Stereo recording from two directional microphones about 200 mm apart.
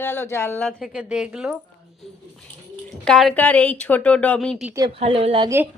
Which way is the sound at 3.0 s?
Centre (ahead or behind).